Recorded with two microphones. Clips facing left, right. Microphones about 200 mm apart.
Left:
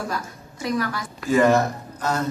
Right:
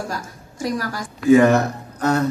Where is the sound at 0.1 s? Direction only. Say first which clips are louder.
Even; 45° right (ahead or behind).